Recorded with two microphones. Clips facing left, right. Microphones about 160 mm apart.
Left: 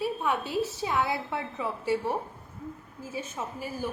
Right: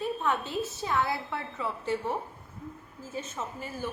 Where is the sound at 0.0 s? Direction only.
10° left (ahead or behind).